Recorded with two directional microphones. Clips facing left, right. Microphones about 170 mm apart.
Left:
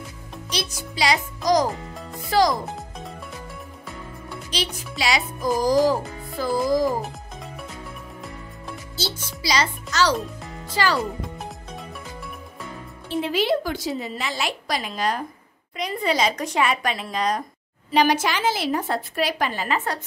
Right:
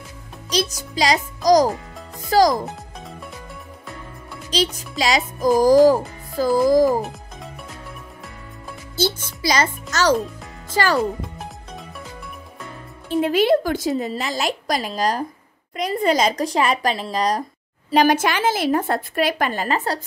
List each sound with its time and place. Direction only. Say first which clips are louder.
0.5 s a child's voice: right 7 dB; 40° right (ahead or behind)
4.5 s a child's voice: right 7 dB; 40° right (ahead or behind)
8.9 s a child's voice: right 9 dB; 50° right (ahead or behind)
13.2 s a child's voice: right 5 dB; 50° right (ahead or behind)
17.9 s a child's voice: right 3 dB; 50° right (ahead or behind)